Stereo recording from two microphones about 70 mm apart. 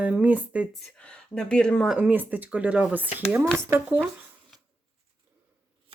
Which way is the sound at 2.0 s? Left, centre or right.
Right.